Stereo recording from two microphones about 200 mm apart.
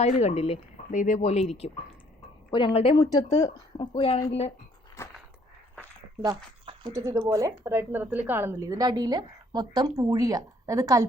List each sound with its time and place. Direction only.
0.0 s speech: 30° left (ahead or behind)
6.2 s speech: 20° right (ahead or behind)